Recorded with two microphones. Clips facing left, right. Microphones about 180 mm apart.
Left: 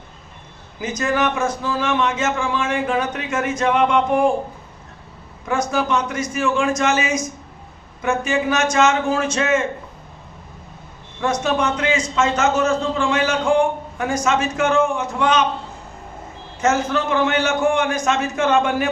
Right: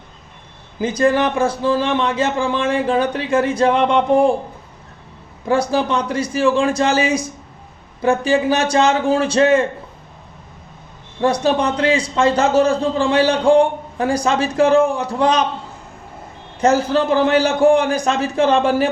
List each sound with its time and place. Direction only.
0.8 s a man's voice: 30° right (ahead or behind)
5.5 s a man's voice: 30° right (ahead or behind)
11.2 s a man's voice: 35° right (ahead or behind)
16.6 s a man's voice: 35° right (ahead or behind)